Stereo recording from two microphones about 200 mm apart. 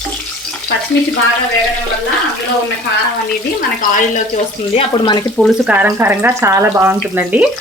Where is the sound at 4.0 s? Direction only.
40° left (ahead or behind).